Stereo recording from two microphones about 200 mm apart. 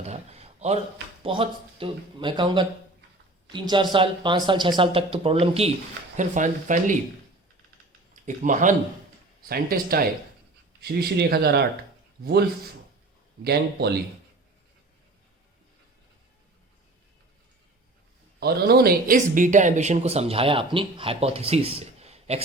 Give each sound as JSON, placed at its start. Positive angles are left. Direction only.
{"t": 0.1, "sound": "a sound", "side_deg": -30}
{"t": 1.2, "sound": "speech", "side_deg": -25}
{"t": 8.1, "sound": "a man's voice", "side_deg": -40}
{"t": 18.3, "sound": "speech", "side_deg": -50}